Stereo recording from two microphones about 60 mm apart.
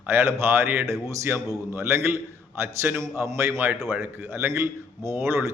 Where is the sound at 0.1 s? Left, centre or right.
Right.